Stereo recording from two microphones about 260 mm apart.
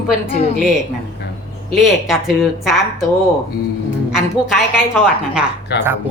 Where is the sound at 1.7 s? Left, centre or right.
Centre.